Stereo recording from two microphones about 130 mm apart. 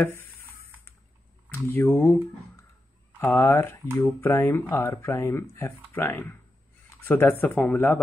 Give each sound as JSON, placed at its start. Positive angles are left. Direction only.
{"t": 0.0, "sound": "speech", "side_deg": 15}
{"t": 1.5, "sound": "speech", "side_deg": 20}
{"t": 3.2, "sound": "speech", "side_deg": 15}